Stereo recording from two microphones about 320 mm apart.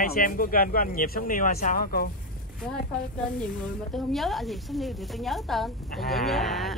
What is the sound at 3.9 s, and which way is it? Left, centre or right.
A woman's voice, centre.